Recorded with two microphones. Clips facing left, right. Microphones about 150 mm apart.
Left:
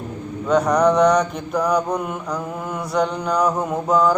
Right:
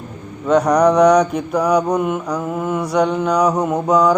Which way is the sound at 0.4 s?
5° right (ahead or behind).